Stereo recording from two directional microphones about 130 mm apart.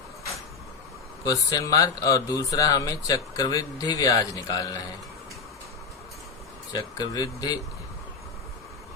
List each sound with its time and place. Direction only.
1.2 s speech: 30° left (ahead or behind)
6.7 s speech: 30° left (ahead or behind)